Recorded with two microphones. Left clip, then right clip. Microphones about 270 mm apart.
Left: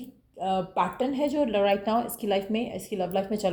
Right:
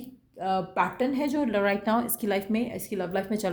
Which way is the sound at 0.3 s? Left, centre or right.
Right.